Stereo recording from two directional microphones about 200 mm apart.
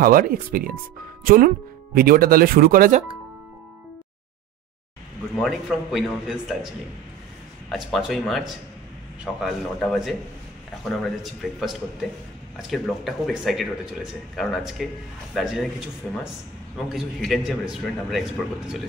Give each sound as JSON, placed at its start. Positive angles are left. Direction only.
{"t": 0.0, "sound": "speech", "side_deg": -45}
{"t": 5.4, "sound": "a man's voice", "side_deg": 0}
{"t": 7.7, "sound": "a man's voice", "side_deg": 0}